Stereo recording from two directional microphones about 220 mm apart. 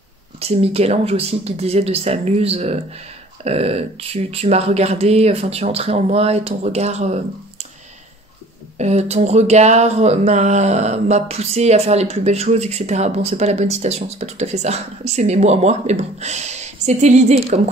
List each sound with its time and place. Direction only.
0.4 s speech: 25° right (ahead or behind)
8.7 s speech: 30° right (ahead or behind)